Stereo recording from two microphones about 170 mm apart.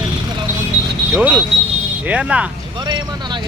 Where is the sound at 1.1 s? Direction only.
10° right (ahead or behind).